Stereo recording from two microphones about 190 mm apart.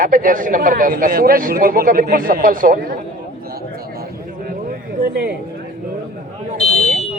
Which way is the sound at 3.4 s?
50° right (ahead or behind).